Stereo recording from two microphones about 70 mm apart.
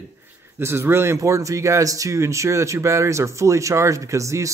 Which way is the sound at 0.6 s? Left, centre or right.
Right.